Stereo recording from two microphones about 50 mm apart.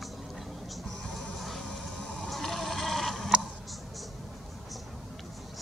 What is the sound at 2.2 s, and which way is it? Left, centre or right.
Vehicle, centre.